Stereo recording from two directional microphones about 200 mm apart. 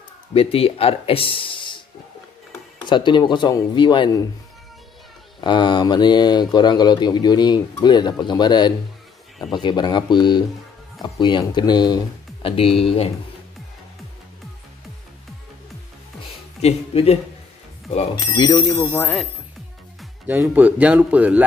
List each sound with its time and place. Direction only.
0.3 s speech: 30° left (ahead or behind)
2.9 s speech: 25° left (ahead or behind)
5.4 s speech: 20° left (ahead or behind)
16.6 s speech: 30° left (ahead or behind); by 19.2 s 10° left (ahead or behind)
20.0 s speech: 10° right (ahead or behind)